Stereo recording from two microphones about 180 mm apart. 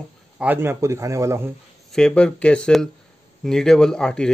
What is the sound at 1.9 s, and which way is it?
Speech, 5° left (ahead or behind).